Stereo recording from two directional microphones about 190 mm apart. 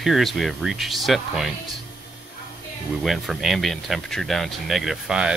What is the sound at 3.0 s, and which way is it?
Speech, centre (ahead or behind).